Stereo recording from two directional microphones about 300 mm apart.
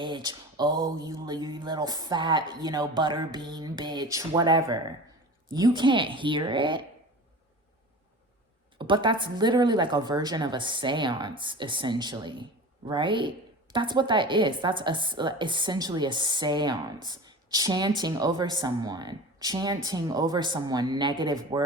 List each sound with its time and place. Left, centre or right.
0.0 s a woman's voice: centre
8.8 s a woman's voice: centre